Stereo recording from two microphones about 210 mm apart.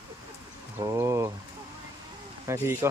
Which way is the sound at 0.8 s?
15° right (ahead or behind).